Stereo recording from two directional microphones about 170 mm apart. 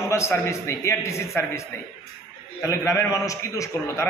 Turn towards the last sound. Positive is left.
turn(degrees=20)  # may be behind; listen again after turning